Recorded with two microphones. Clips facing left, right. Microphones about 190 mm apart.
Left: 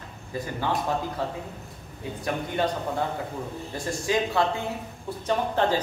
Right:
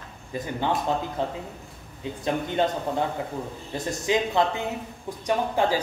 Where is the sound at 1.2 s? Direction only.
20° right (ahead or behind).